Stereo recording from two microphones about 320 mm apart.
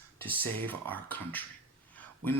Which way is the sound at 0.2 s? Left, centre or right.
Centre.